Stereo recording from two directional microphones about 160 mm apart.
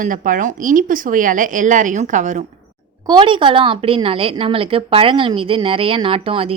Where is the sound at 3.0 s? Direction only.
30° right (ahead or behind).